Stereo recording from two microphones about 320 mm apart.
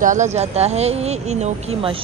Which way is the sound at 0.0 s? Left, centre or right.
Right.